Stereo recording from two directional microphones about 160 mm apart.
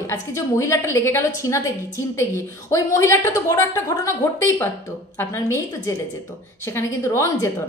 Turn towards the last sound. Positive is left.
turn(degrees=20)  # may be behind; listen again after turning